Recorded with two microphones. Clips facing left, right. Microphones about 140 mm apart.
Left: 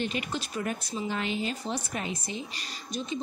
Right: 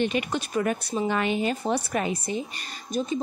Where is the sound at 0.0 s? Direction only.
65° right (ahead or behind).